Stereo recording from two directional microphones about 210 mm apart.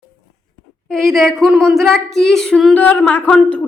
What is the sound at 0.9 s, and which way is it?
A woman's voice, centre (ahead or behind).